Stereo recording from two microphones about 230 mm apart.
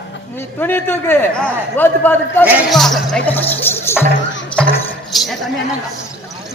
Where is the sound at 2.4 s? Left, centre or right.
Centre.